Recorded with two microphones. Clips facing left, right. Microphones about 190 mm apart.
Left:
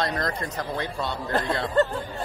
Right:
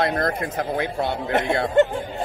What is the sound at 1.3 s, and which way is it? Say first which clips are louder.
Speech: right 3 dB; 20° right (ahead or behind).